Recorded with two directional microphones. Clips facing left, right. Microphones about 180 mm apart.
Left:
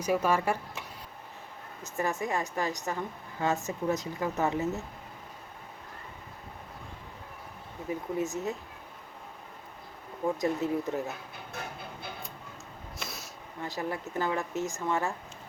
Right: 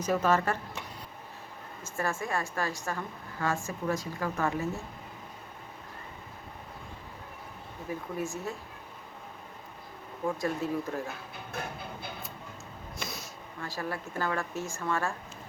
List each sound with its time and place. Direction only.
0.0 s speech: 10° left (ahead or behind)
7.9 s speech: 20° left (ahead or behind)
10.4 s speech: 20° left (ahead or behind)
13.0 s a sound: centre (ahead or behind)
13.6 s speech: 20° left (ahead or behind)